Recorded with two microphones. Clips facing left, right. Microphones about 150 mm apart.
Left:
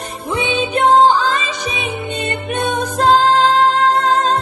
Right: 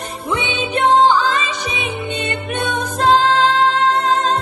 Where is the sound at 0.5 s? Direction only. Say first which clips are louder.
Left 2 dB; 30° left (ahead or behind).